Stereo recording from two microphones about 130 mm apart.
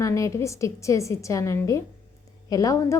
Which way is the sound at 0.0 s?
25° left (ahead or behind).